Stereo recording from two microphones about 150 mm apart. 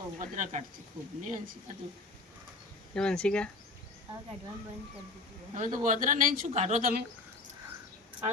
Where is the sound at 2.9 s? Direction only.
5° left (ahead or behind).